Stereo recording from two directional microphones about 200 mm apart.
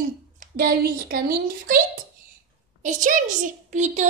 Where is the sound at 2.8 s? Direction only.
40° right (ahead or behind).